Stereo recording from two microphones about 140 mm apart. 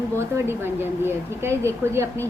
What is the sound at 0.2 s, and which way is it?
A woman's voice, 15° right (ahead or behind).